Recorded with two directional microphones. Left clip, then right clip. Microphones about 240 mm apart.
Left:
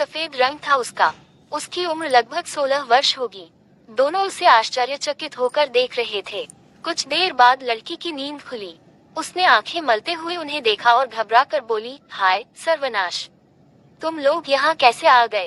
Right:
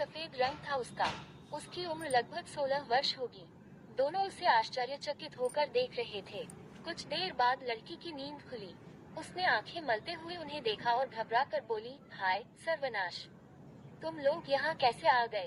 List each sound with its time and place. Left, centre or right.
0.0 s speech: left